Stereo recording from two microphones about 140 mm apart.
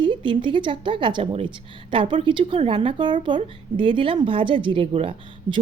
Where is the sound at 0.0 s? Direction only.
35° right (ahead or behind).